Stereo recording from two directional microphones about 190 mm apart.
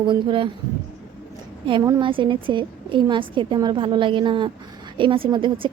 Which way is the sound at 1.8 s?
20° right (ahead or behind).